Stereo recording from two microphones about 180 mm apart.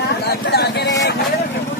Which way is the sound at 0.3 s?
65° left (ahead or behind).